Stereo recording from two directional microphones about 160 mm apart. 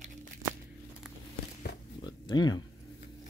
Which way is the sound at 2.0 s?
25° left (ahead or behind).